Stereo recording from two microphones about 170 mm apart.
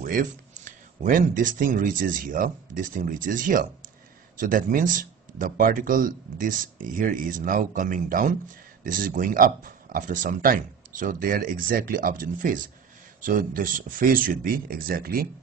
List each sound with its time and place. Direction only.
0.0 s speech: 55° right (ahead or behind)